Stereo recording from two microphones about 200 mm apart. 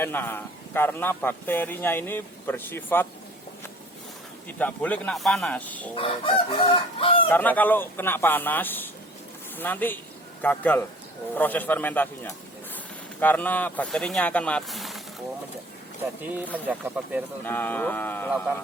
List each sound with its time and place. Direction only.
0.0 s a man's voice: 10° left (ahead or behind)
4.5 s a man's voice: 10° left (ahead or behind)
6.0 s chicken: 25° left (ahead or behind)
7.3 s a man's voice: 10° left (ahead or behind)
16.6 s speech: 10° right (ahead or behind)
17.4 s a man's voice: 10° left (ahead or behind)